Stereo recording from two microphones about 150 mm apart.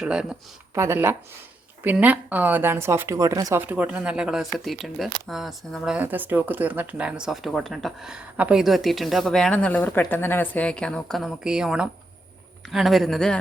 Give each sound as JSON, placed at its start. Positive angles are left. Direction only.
{"t": 0.0, "sound": "speech", "side_deg": -5}
{"t": 0.7, "sound": "speech", "side_deg": -15}